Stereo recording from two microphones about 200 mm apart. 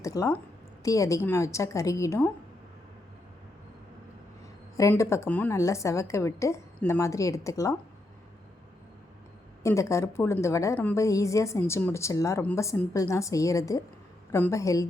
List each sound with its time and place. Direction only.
0.0 s a woman's voice: 15° left (ahead or behind)
4.8 s a woman's voice: 15° left (ahead or behind)
9.6 s a woman's voice: 15° left (ahead or behind)